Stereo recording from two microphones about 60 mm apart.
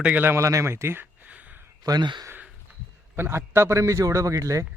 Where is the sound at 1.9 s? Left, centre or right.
Right.